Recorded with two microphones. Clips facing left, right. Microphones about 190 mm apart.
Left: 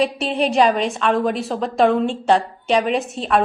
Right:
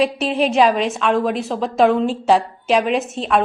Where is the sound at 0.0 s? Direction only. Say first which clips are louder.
Right 2 dB; centre (ahead or behind).